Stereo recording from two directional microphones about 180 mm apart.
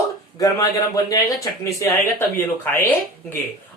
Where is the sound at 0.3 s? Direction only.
20° left (ahead or behind).